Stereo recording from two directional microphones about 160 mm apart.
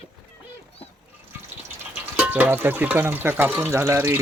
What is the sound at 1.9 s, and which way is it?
Speech, 10° right (ahead or behind).